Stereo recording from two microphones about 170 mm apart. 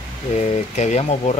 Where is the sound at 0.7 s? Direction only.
40° left (ahead or behind).